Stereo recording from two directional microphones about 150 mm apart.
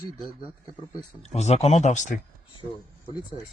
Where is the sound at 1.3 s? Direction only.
45° left (ahead or behind).